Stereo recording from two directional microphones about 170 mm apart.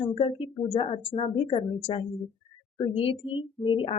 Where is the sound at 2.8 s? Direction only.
35° left (ahead or behind).